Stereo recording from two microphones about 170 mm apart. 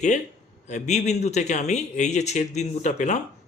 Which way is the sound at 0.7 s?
45° left (ahead or behind).